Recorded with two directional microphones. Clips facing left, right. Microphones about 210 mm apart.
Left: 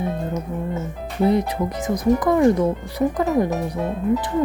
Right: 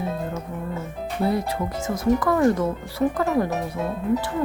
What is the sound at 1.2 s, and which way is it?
Speech, 20° left (ahead or behind).